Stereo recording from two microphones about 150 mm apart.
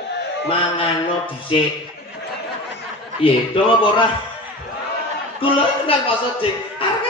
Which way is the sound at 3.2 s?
35° left (ahead or behind).